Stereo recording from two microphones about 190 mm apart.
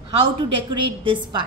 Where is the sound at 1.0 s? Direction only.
25° right (ahead or behind).